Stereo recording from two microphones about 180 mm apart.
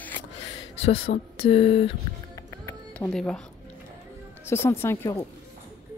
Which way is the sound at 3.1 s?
5° left (ahead or behind).